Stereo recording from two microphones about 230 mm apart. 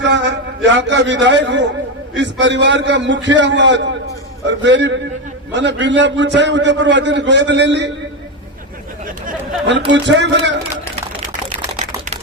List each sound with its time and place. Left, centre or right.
0.0 s a man's voice: right
9.6 s a man's voice: right